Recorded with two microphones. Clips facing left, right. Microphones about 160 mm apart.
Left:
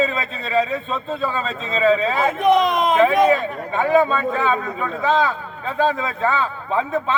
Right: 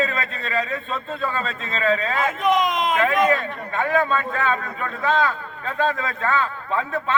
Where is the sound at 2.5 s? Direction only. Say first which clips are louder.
Left 4 dB; 35° left (ahead or behind).